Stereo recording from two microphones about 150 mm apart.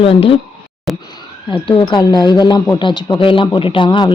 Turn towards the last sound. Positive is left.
turn(degrees=35)  # may be behind; listen again after turning